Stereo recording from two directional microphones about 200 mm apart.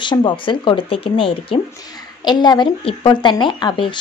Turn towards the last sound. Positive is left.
turn(degrees=25)  # may be behind; listen again after turning